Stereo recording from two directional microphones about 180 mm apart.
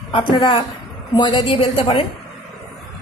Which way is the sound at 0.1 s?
25° left (ahead or behind).